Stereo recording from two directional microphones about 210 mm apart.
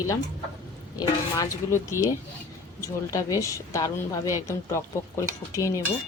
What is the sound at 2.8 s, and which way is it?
Speech, 15° left (ahead or behind).